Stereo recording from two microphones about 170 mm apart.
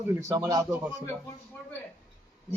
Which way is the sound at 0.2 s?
20° right (ahead or behind).